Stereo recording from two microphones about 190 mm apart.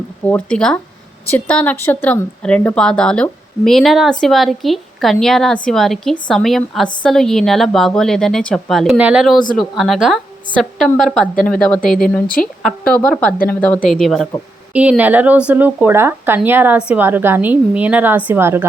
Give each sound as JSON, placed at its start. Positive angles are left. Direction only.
{"t": 0.3, "sound": "a woman's voice", "side_deg": 5}